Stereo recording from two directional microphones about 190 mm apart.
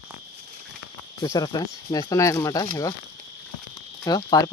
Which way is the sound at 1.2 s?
20° left (ahead or behind).